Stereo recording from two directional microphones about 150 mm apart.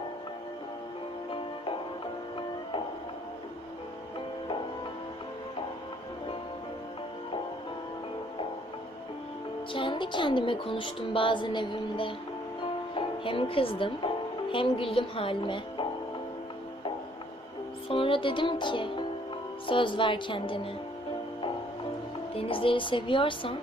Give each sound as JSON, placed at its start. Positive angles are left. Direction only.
{"t": 1.3, "sound": "music", "side_deg": 35}
{"t": 9.7, "sound": "speech", "side_deg": 35}
{"t": 17.8, "sound": "speech", "side_deg": 35}
{"t": 22.4, "sound": "speech", "side_deg": 35}